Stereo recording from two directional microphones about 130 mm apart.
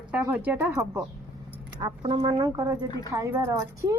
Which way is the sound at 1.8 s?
40° right (ahead or behind).